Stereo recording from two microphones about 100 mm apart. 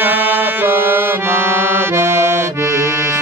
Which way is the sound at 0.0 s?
20° right (ahead or behind).